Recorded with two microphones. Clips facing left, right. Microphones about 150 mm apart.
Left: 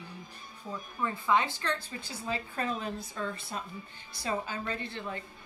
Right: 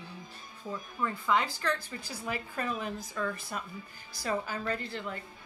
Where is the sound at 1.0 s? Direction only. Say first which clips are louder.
Left 1 dB; 20° left (ahead or behind).